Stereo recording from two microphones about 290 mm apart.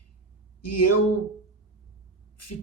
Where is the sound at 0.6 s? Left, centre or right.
Left.